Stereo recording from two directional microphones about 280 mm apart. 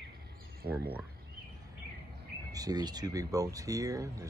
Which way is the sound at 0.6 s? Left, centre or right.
Right.